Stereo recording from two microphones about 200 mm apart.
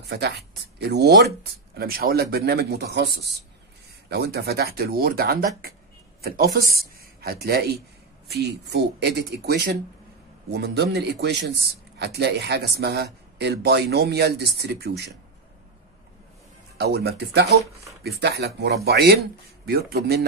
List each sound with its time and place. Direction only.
0.1 s speech: 55° right (ahead or behind)
16.7 s speech: 55° right (ahead or behind)